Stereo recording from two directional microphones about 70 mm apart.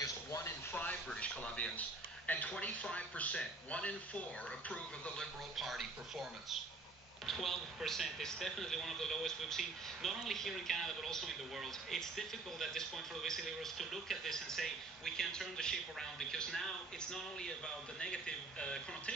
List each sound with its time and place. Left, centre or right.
0.0 s a sound: left
1.1 s speech: centre
5.6 s speech: centre
7.2 s speech: centre
17.9 s a man's voice: centre